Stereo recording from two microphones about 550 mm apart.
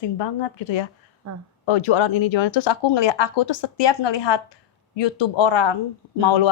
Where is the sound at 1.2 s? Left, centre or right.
Right.